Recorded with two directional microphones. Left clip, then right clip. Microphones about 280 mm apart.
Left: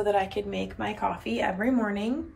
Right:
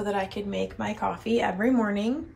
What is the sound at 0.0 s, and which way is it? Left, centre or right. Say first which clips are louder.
Speech: left 3 dB; centre.